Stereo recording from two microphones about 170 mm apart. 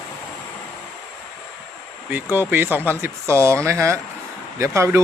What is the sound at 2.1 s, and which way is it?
Speech, 10° right (ahead or behind).